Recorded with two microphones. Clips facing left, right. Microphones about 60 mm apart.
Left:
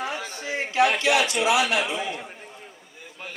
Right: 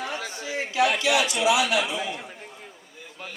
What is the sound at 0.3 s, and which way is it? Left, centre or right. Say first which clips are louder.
A man's voice: left 2 dB; left.